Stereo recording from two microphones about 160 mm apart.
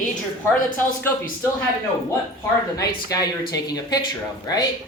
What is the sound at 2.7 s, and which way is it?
A man's voice, 20° left (ahead or behind).